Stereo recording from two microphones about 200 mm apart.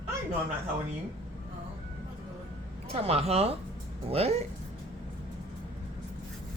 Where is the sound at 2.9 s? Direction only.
30° right (ahead or behind).